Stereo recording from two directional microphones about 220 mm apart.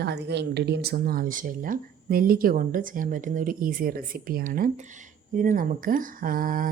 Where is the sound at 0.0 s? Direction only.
50° right (ahead or behind).